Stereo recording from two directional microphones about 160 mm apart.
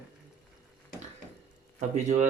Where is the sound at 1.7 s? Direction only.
45° right (ahead or behind).